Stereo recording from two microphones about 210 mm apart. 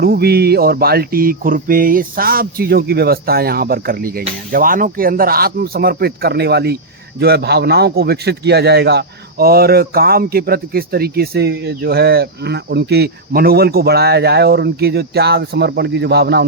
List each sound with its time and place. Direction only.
0.0 s a man's voice: 45° right (ahead or behind)